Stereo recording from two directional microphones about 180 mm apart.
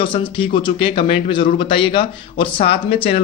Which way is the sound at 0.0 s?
30° left (ahead or behind).